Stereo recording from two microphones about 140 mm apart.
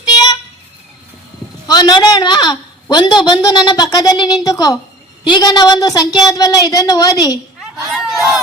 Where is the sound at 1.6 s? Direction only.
30° left (ahead or behind).